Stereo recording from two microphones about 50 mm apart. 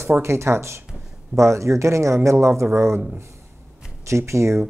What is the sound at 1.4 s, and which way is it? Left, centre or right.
Speech, right.